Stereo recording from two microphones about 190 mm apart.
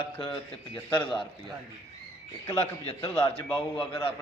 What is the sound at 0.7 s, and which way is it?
Speech, 10° left (ahead or behind).